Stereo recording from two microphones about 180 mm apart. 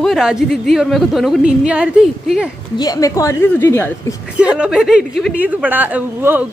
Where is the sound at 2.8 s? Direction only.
20° left (ahead or behind).